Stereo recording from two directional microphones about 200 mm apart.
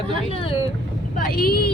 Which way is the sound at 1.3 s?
50° left (ahead or behind).